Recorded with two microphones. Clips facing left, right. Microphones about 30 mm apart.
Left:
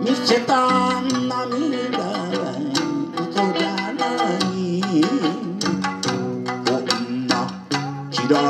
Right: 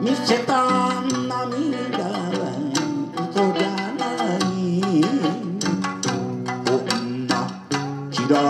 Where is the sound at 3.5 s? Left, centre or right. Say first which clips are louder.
Left 1 dB; left.